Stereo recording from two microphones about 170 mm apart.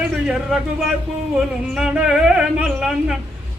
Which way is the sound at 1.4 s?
5° right (ahead or behind).